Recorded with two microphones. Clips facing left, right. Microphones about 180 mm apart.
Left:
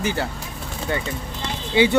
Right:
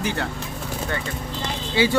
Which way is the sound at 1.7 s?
20° left (ahead or behind).